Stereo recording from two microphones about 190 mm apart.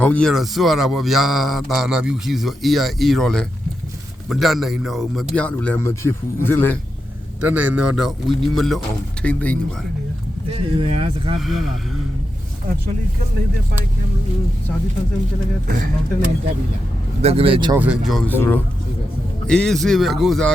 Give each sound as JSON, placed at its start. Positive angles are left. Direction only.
{"t": 0.0, "sound": "speech", "side_deg": 5}
{"t": 7.4, "sound": "speech", "side_deg": -10}
{"t": 10.5, "sound": "speech", "side_deg": -30}
{"t": 11.3, "sound": "speech", "side_deg": 0}
{"t": 17.2, "sound": "speech", "side_deg": -30}
{"t": 17.7, "sound": "speech", "side_deg": -5}